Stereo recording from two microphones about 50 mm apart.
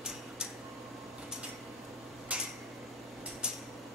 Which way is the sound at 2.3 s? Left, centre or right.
Right.